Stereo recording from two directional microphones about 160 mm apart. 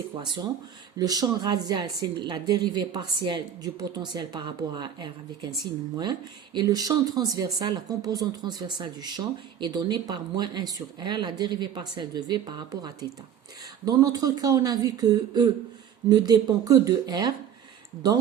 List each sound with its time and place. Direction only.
0.9 s speech: 25° right (ahead or behind)